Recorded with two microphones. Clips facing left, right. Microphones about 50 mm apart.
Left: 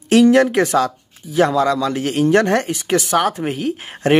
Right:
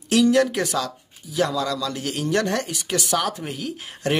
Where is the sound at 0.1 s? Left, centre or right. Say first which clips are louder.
Left 6 dB; left.